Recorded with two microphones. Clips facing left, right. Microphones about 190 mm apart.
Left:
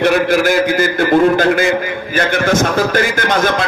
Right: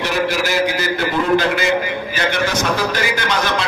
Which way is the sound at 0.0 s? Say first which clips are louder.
Left 7 dB; 55° left (ahead or behind).